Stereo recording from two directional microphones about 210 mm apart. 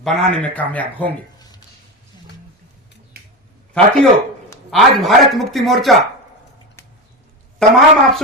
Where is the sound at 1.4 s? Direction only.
20° left (ahead or behind).